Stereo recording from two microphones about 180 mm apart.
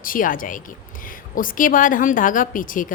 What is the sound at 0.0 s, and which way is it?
Speech, 50° left (ahead or behind).